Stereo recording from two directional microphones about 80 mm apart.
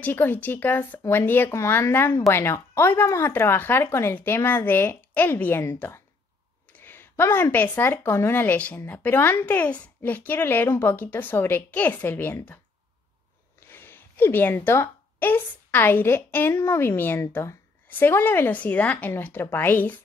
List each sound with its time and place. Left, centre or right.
0.0 s a woman's voice: left
13.7 s a woman's voice: left
17.8 s a woman's voice: left